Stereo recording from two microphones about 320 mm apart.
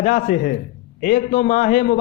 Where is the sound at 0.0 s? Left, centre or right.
Left.